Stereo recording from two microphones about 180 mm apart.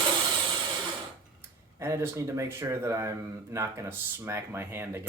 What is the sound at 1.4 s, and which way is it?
Speech, 15° right (ahead or behind).